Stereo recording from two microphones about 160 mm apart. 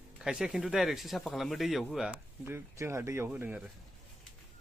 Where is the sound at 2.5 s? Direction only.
15° right (ahead or behind).